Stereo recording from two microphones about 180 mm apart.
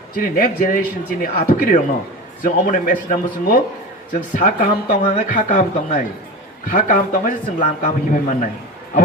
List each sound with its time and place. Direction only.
0.2 s a man's voice: 50° left (ahead or behind)